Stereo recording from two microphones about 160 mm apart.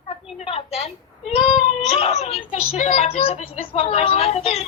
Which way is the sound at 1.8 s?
40° left (ahead or behind).